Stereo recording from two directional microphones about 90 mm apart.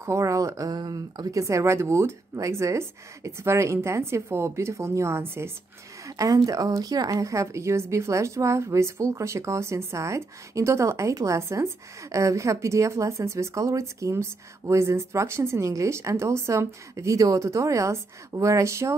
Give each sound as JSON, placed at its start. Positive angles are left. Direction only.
{"t": 0.0, "sound": "a woman's voice", "side_deg": -35}
{"t": 6.0, "sound": "a woman's voice", "side_deg": -40}